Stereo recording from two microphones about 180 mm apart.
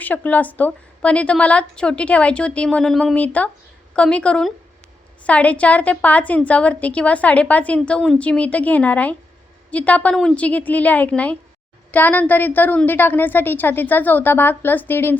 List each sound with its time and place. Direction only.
0.0 s a woman's voice: 10° left (ahead or behind)